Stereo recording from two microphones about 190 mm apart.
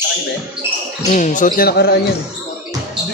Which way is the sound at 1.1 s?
40° left (ahead or behind).